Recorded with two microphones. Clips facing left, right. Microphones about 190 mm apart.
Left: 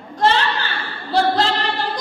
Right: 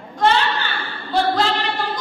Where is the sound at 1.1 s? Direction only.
35° left (ahead or behind).